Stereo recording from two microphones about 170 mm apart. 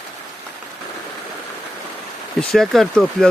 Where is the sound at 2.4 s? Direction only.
Centre (ahead or behind).